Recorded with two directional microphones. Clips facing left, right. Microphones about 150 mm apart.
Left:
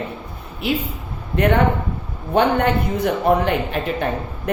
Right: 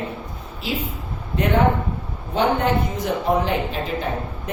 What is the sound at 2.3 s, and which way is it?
A woman's voice, 60° left (ahead or behind).